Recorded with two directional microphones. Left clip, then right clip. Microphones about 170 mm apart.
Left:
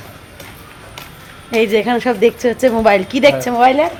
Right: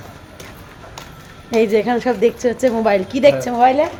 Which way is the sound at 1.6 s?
15° left (ahead or behind).